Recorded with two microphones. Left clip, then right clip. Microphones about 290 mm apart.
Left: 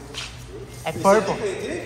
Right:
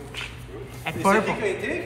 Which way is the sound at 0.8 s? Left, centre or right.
Left.